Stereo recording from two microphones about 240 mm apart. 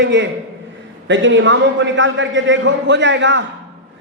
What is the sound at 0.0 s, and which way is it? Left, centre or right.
A woman's voice, right.